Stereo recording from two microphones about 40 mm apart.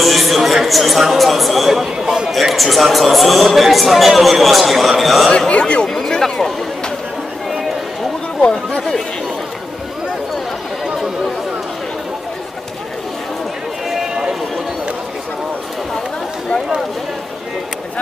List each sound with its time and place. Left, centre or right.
0.0 s a man's voice: centre
2.0 s a sound: centre
2.3 s speech: centre
5.5 s speech: left
8.4 s speech: left